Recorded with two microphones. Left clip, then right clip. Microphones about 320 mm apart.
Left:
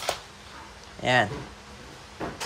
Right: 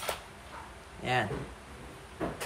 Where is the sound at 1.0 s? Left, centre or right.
Centre.